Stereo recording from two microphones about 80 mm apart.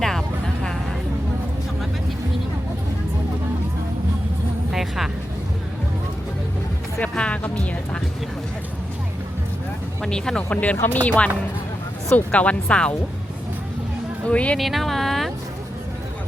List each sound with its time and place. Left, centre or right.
0.0 s vehicle: centre
4.7 s vehicle: centre
7.0 s music: centre
10.0 s speech: centre
14.3 s speech: centre
14.6 s a sound: centre